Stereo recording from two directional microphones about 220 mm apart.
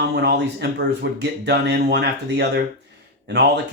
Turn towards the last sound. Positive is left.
turn(degrees=-50)  # may be behind; listen again after turning